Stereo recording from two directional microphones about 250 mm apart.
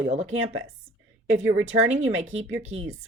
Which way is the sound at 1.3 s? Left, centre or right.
Right.